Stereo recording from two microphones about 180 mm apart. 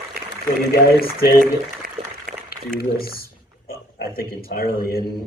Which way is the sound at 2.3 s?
55° right (ahead or behind).